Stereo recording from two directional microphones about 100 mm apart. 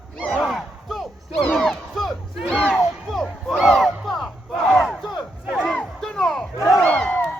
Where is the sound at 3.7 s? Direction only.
Centre (ahead or behind).